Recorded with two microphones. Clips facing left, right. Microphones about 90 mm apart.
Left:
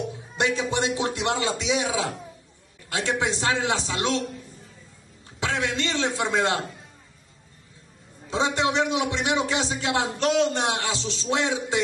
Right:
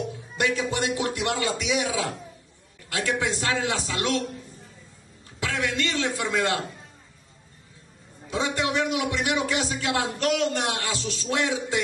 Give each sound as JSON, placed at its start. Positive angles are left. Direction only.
{"t": 0.1, "sound": "a man's voice", "side_deg": 25}
{"t": 5.4, "sound": "a man's voice", "side_deg": 25}
{"t": 8.3, "sound": "a man's voice", "side_deg": 25}